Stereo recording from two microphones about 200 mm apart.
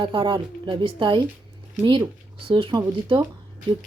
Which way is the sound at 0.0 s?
25° right (ahead or behind).